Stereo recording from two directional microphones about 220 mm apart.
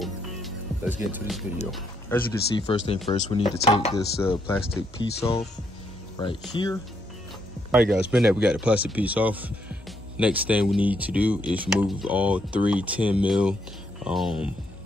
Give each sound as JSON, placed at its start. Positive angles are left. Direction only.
{"t": 0.0, "sound": "music", "side_deg": -5}
{"t": 1.7, "sound": "speech", "side_deg": 5}
{"t": 3.1, "sound": "speech", "side_deg": 25}
{"t": 3.9, "sound": "speech", "side_deg": 15}
{"t": 7.7, "sound": "speech", "side_deg": -5}